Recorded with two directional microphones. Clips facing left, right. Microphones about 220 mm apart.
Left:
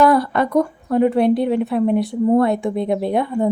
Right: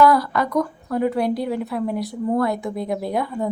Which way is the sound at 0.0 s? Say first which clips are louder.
Left 2 dB; 25° left (ahead or behind).